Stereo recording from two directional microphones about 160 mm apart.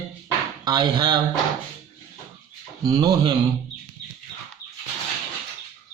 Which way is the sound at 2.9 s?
25° right (ahead or behind).